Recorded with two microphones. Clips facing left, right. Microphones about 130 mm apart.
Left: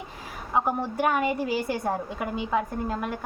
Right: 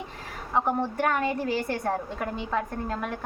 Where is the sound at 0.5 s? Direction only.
10° left (ahead or behind).